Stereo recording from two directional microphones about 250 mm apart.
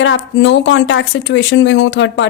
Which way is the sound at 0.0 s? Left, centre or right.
Left.